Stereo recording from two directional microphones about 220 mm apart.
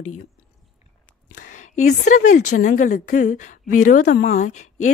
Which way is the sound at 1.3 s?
35° left (ahead or behind).